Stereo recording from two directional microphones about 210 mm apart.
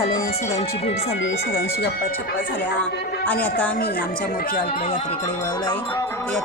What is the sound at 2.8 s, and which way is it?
Speech, 5° left (ahead or behind).